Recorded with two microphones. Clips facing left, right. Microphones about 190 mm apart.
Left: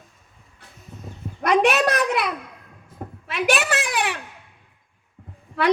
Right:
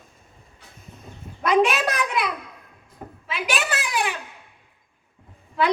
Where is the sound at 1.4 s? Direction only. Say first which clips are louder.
Left 1 dB; 65° left (ahead or behind).